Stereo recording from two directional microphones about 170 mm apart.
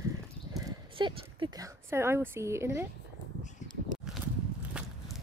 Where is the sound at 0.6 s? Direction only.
25° right (ahead or behind).